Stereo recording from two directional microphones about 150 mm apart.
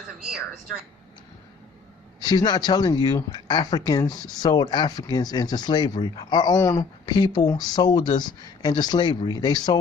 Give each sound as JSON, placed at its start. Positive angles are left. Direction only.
{"t": 0.2, "sound": "speech", "side_deg": -5}
{"t": 2.2, "sound": "speech", "side_deg": 30}